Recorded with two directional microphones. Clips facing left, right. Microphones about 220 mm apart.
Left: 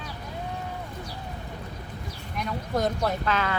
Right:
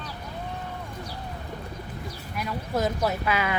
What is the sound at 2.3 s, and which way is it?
Speech, 5° right (ahead or behind).